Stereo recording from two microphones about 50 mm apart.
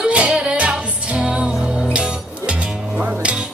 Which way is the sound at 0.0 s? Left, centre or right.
Right.